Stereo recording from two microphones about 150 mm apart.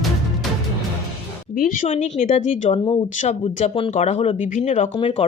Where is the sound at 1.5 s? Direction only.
65° left (ahead or behind).